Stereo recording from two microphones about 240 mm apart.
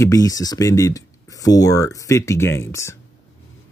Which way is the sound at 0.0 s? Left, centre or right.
Centre.